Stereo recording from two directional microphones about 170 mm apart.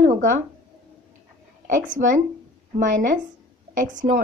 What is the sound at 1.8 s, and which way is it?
Speech, 50° right (ahead or behind).